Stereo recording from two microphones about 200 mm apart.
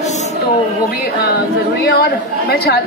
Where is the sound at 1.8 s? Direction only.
50° left (ahead or behind).